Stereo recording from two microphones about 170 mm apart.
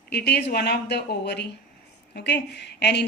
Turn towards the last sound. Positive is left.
turn(degrees=85)